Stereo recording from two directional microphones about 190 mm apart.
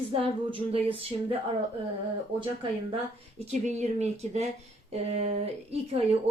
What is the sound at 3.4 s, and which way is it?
Speech, 35° right (ahead or behind).